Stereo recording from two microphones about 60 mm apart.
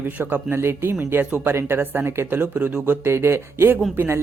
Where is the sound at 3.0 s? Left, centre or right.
Right.